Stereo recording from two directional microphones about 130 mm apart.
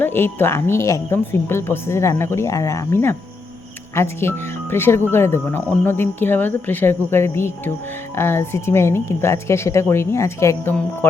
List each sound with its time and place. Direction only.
0.0 s a woman's voice: 15° left (ahead or behind)